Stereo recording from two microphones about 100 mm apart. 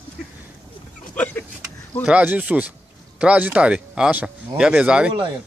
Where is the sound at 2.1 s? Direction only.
15° right (ahead or behind).